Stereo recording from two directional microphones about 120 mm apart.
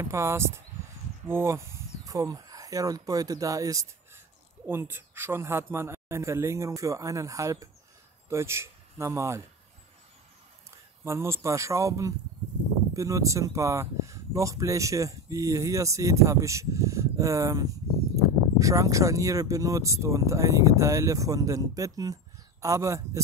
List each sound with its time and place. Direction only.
0.0 s speech: 25° right (ahead or behind)
4.6 s speech: 20° right (ahead or behind)
11.1 s speech: 20° right (ahead or behind)